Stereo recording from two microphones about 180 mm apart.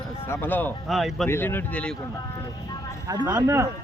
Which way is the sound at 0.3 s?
10° left (ahead or behind).